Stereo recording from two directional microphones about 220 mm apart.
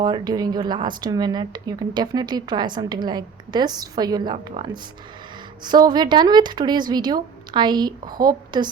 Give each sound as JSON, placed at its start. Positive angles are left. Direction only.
{"t": 0.0, "sound": "speech", "side_deg": -20}